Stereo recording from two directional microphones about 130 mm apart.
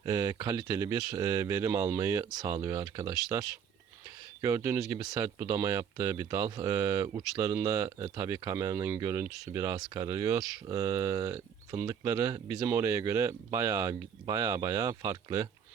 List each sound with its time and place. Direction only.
0.0 s speech: 25° right (ahead or behind)